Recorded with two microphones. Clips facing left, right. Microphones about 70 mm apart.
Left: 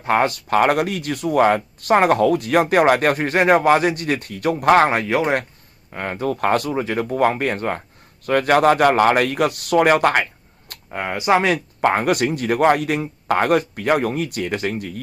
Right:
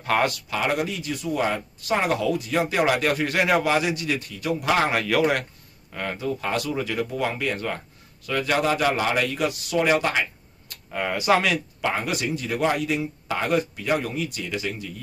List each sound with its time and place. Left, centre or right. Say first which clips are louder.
0.0 s speech: left 4 dB; left
0.3 s speech: left 9 dB; left
4.9 s speech: left 2 dB; left
6.1 s speech: left 9 dB; left
6.7 s speech: left 5 dB; left
10.9 s speech: left 3 dB; left
11.5 s speech: left 7 dB; left